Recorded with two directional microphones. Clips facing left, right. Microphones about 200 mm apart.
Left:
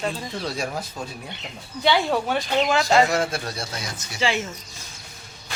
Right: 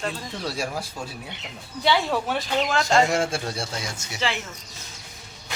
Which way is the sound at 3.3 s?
25° right (ahead or behind).